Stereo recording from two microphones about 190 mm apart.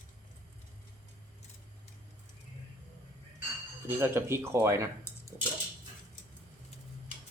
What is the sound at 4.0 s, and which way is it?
Speech, 15° right (ahead or behind).